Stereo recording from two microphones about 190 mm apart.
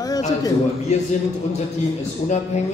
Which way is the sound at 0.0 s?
20° left (ahead or behind).